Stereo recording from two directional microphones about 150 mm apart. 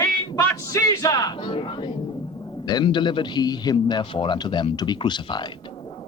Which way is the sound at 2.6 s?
30° left (ahead or behind).